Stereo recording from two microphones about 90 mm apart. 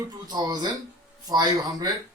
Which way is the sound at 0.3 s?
45° right (ahead or behind).